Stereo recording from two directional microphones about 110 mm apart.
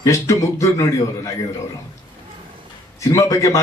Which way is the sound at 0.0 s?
30° left (ahead or behind).